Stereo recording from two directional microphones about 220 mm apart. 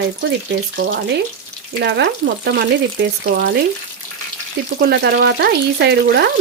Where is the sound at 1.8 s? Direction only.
50° right (ahead or behind).